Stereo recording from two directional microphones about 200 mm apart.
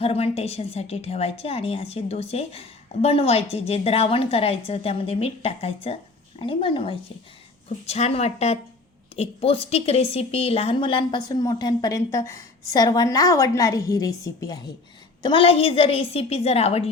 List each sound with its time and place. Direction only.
0.0 s a woman's voice: 30° left (ahead or behind)